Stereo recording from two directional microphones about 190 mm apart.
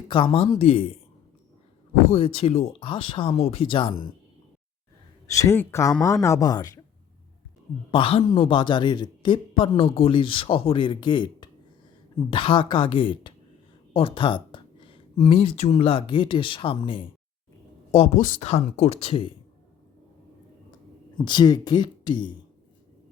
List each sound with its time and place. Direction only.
0.1 s a man's voice: 25° left (ahead or behind)
2.0 s a man's voice: 30° left (ahead or behind)
5.3 s speech: 15° left (ahead or behind)
7.9 s a man's voice: 30° left (ahead or behind)
21.2 s a man's voice: 25° left (ahead or behind)